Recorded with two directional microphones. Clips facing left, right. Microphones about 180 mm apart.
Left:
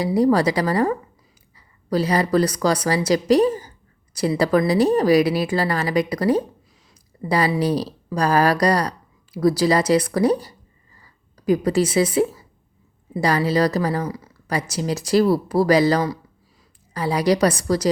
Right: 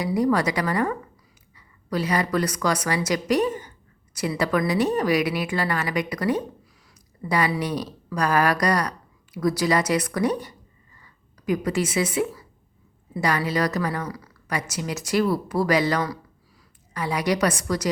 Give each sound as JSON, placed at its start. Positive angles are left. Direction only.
{"t": 0.0, "sound": "a woman's voice", "side_deg": 35}
{"t": 10.9, "sound": "a sound", "side_deg": 35}
{"t": 13.1, "sound": "speech", "side_deg": 30}